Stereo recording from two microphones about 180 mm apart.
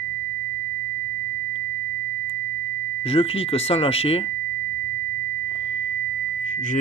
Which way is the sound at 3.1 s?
35° left (ahead or behind).